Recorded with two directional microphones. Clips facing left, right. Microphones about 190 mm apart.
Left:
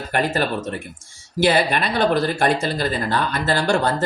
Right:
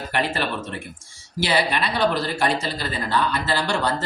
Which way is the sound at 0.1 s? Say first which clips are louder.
Left 4 dB; 45° left (ahead or behind).